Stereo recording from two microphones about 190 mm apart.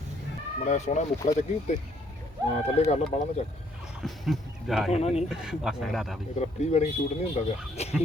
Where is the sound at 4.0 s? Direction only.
Centre (ahead or behind).